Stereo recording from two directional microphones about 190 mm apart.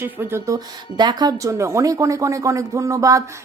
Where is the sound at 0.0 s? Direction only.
10° right (ahead or behind).